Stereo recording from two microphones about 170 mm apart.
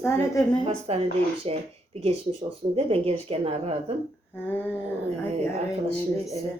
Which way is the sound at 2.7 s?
35° right (ahead or behind).